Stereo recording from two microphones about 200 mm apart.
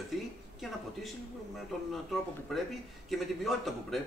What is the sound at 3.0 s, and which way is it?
Speech, centre (ahead or behind).